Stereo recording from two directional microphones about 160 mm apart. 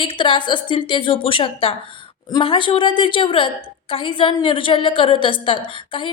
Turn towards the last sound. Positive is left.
turn(degrees=30)  # may be behind; listen again after turning